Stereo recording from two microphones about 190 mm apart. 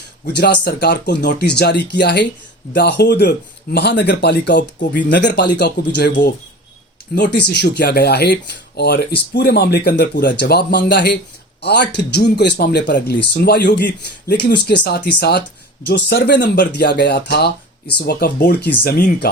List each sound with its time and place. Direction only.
0.3 s speech: 60° left (ahead or behind)